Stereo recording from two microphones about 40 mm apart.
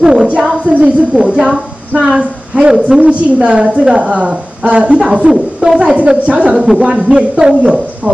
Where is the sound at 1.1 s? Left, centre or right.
Right.